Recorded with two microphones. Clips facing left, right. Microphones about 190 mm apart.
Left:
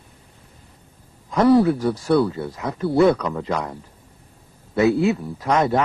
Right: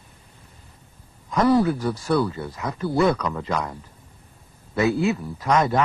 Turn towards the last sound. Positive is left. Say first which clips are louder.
# left 1 dB
turn(degrees=30)  # may be behind; listen again after turning